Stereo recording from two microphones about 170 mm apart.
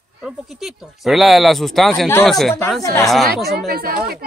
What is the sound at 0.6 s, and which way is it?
Speech, centre (ahead or behind).